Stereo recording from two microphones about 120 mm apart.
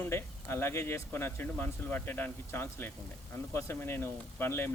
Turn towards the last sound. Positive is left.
turn(degrees=20)  # may be behind; listen again after turning